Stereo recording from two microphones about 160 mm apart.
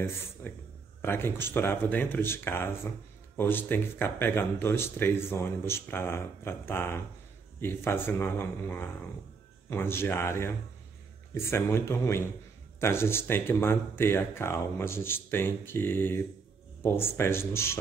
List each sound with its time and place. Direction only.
0.4 s speech: 15° left (ahead or behind)